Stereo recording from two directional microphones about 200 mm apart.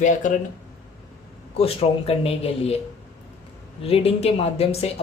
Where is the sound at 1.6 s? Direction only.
30° left (ahead or behind).